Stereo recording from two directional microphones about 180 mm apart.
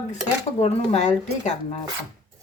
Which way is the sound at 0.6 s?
40° left (ahead or behind).